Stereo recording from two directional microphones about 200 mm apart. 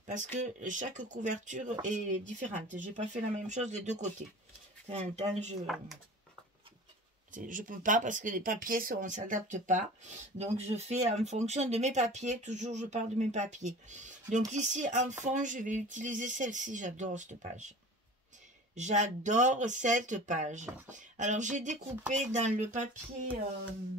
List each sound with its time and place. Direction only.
0.0 s speech: 40° right (ahead or behind)
7.3 s speech: 40° right (ahead or behind)
18.8 s speech: 35° right (ahead or behind)